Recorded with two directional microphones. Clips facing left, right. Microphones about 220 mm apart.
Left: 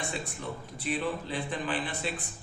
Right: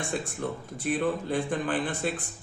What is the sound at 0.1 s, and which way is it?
A man's voice, 50° right (ahead or behind).